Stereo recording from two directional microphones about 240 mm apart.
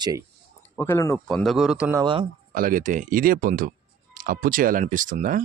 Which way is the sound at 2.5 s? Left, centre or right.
Right.